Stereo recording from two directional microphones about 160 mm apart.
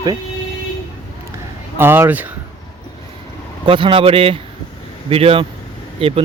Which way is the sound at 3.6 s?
30° right (ahead or behind).